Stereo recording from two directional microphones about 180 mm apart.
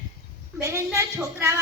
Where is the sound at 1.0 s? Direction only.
15° right (ahead or behind).